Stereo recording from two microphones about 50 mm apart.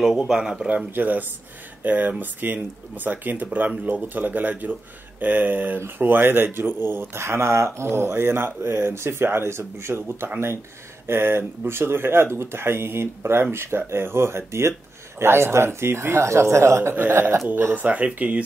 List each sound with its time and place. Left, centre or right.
0.2 s speech: centre
0.9 s speech: right
17.7 s speech: right